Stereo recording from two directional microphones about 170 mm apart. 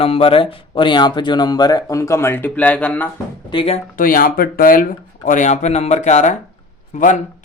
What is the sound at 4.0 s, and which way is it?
Speech, 55° left (ahead or behind).